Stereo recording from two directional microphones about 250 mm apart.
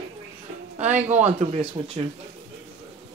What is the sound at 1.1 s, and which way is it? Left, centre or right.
Speech, right.